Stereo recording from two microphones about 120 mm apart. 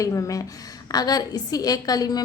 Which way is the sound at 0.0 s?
25° left (ahead or behind).